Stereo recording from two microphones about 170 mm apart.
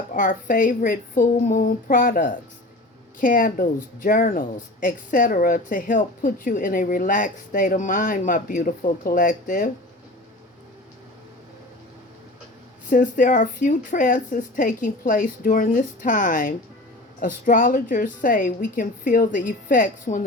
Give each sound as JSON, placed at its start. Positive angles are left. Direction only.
{"t": 0.1, "sound": "speech", "side_deg": 55}
{"t": 12.9, "sound": "speech", "side_deg": 50}